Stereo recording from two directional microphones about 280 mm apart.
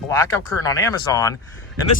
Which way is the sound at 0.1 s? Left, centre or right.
Centre.